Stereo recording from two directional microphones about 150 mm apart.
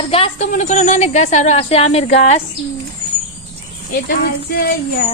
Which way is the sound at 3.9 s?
85° left.